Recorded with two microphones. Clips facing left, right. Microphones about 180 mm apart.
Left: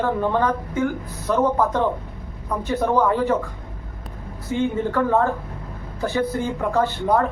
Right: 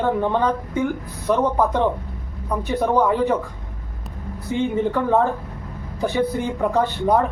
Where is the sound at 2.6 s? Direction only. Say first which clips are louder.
Right 1 dB; 15° right (ahead or behind).